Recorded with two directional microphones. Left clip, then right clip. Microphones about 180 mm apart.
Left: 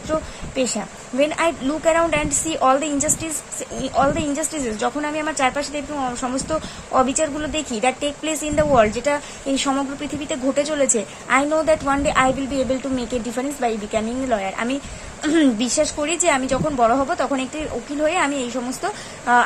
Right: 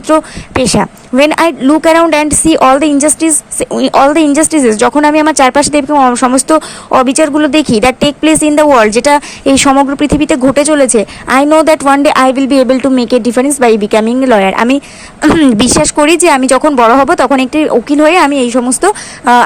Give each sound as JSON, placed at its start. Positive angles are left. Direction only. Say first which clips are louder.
{"t": 0.5, "sound": "a woman's voice", "louder": "right 13 dB", "side_deg": -40}